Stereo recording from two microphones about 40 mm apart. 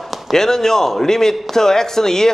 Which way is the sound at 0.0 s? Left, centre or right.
Centre.